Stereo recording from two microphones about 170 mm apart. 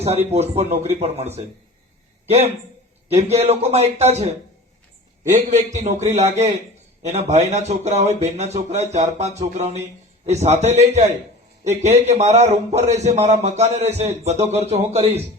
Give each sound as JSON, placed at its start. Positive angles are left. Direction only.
{"t": 0.0, "sound": "a man's voice", "side_deg": -35}
{"t": 3.1, "sound": "a man's voice", "side_deg": -40}